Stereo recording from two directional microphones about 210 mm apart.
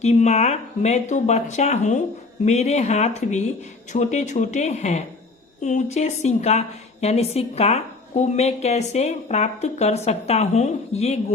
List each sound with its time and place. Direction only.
0.0 s a woman's voice: 35° left (ahead or behind)